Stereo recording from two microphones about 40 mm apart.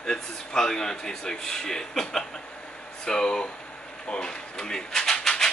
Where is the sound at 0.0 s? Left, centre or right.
Centre.